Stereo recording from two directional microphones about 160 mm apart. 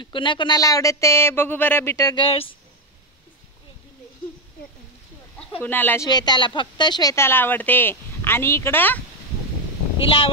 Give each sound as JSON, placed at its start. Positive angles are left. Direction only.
{"t": 0.0, "sound": "speech", "side_deg": 30}
{"t": 2.2, "sound": "speech", "side_deg": 35}
{"t": 5.6, "sound": "speech", "side_deg": 10}
{"t": 6.0, "sound": "speech", "side_deg": 25}
{"t": 10.0, "sound": "speech", "side_deg": 35}